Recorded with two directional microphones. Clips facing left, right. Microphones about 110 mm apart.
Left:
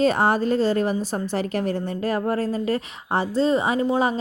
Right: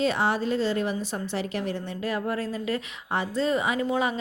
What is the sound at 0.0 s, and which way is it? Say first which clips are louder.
A woman's voice: left 5 dB; 45° left (ahead or behind).